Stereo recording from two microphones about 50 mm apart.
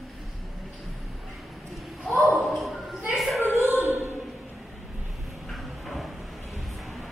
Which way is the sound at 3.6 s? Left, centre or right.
Right.